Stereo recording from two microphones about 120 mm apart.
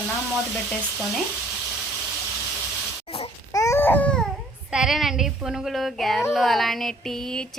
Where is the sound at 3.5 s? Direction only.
25° left (ahead or behind); by 4.2 s 10° left (ahead or behind).